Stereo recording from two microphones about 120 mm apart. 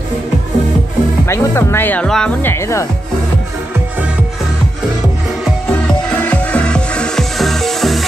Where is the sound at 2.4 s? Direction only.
25° left (ahead or behind).